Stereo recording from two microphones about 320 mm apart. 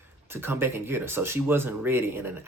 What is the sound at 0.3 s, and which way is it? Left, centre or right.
Speech, centre.